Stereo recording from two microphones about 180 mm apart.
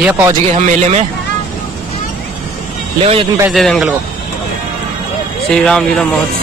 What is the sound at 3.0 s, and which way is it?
Speech, 35° right (ahead or behind).